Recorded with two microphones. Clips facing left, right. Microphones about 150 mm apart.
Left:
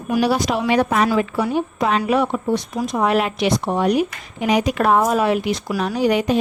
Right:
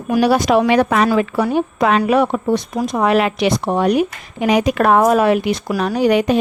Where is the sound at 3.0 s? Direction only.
90° right; by 6.4 s 65° right (ahead or behind).